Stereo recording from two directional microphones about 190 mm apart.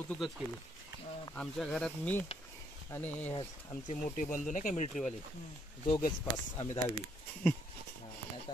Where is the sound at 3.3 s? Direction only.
35° left (ahead or behind).